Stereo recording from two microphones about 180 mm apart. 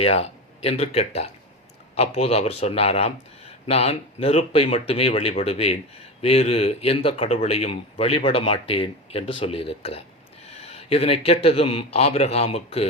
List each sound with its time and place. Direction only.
0.0 s speech: 35° left (ahead or behind)